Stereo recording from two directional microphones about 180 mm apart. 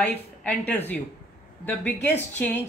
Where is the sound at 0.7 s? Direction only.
10° left (ahead or behind).